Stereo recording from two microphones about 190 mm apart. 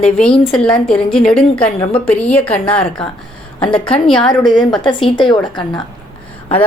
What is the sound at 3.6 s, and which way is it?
Speech, 25° left (ahead or behind).